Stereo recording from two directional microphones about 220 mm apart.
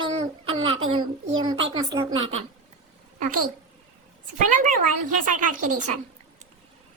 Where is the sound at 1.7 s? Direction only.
15° right (ahead or behind).